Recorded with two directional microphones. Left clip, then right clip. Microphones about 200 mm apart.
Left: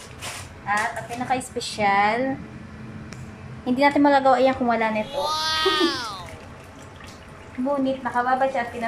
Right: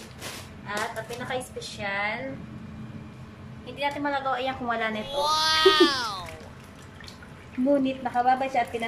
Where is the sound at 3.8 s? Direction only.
30° left (ahead or behind).